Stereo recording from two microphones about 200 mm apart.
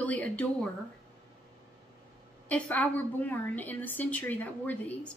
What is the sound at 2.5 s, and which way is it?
A woman's voice, 5° left (ahead or behind).